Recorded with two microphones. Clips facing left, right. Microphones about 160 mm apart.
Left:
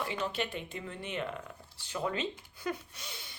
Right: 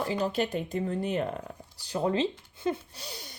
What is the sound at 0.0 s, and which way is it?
Speech, 35° right (ahead or behind).